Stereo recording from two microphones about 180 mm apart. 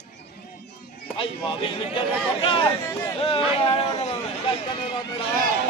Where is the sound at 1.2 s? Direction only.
30° left (ahead or behind).